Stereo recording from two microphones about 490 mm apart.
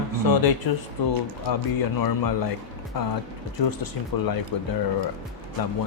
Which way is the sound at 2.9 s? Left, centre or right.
Left.